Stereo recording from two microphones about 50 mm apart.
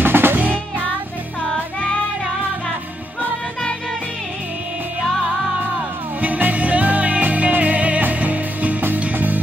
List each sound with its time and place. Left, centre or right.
0.0 s music: right
0.4 s music: right
6.2 s music: right